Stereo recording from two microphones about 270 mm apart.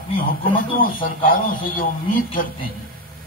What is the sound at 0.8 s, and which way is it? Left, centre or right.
A man's voice, left.